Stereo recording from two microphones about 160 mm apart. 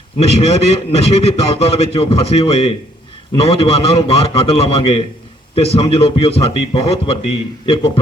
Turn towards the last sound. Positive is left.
turn(degrees=35)  # may be behind; listen again after turning